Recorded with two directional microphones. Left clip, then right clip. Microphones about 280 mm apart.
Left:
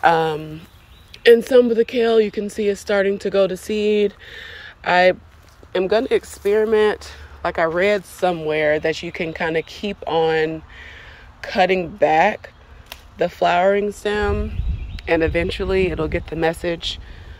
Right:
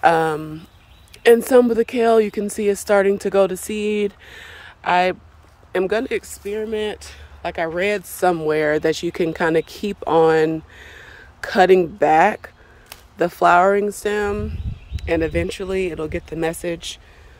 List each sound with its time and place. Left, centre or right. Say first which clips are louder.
0.0 s a woman's voice: even; centre